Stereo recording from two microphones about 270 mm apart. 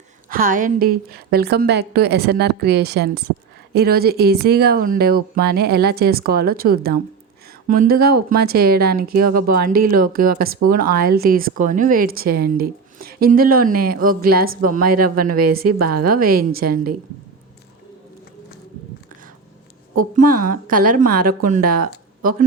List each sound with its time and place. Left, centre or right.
0.3 s speech: right
15.0 s speech: right
15.3 s speech: right
20.0 s a woman's voice: right